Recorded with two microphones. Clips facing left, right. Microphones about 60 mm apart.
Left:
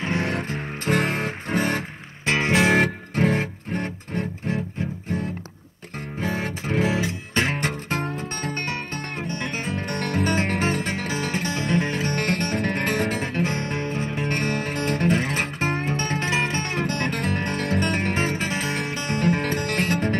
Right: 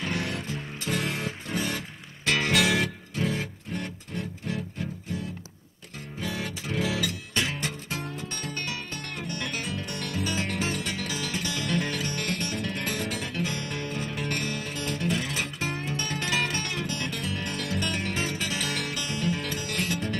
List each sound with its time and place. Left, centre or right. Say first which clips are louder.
0.0 s music: left 6 dB; left
2.2 s music: left 4 dB; left
12.1 s music: left 7 dB; left